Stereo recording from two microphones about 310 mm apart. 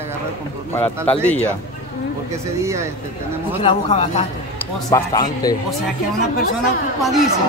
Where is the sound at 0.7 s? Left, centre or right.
Centre.